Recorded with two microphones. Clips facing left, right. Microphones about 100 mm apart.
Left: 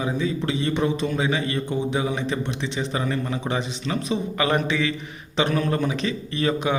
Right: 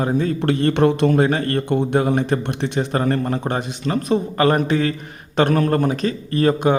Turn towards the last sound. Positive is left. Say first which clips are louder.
# right 6 dB
turn(degrees=-45)  # may be behind; listen again after turning